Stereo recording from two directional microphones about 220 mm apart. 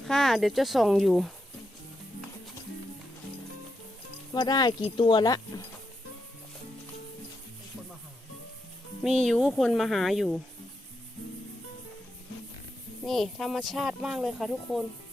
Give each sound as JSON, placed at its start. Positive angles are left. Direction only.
{"t": 0.0, "sound": "speech", "side_deg": 0}
{"t": 4.4, "sound": "speech", "side_deg": 20}
{"t": 9.0, "sound": "speech", "side_deg": 0}
{"t": 13.1, "sound": "speech", "side_deg": 0}